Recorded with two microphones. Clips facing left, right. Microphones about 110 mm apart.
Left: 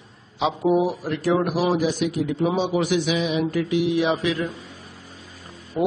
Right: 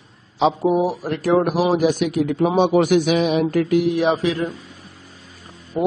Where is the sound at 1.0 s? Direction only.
45° right (ahead or behind).